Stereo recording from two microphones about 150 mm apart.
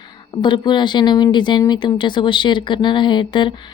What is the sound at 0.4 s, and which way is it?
A woman's voice, 30° left (ahead or behind).